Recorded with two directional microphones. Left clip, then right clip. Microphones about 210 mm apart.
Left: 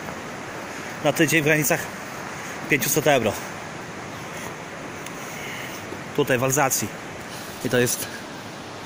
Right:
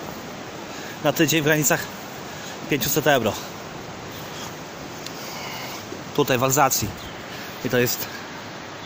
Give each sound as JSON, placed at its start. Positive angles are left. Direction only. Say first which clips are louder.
{"t": 1.0, "sound": "speech", "louder": "even", "side_deg": -5}
{"t": 6.1, "sound": "speech", "louder": "right 2 dB", "side_deg": -15}
{"t": 7.7, "sound": "speech", "louder": "even", "side_deg": 0}